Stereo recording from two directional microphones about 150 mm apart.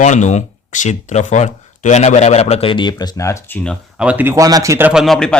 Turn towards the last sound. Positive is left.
turn(degrees=5)  # may be behind; listen again after turning